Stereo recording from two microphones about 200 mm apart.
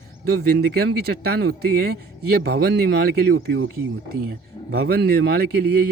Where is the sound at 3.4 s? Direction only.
65° right (ahead or behind).